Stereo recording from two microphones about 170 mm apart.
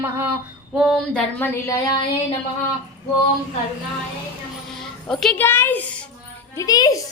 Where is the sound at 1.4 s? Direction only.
15° left (ahead or behind).